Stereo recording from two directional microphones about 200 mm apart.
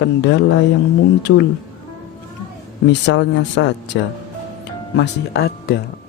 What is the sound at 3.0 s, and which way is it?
Speech, 65° left (ahead or behind).